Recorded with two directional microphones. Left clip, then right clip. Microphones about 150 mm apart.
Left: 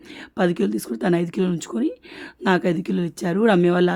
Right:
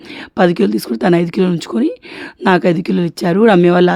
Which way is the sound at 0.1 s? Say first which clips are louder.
Right 9 dB; 35° right (ahead or behind).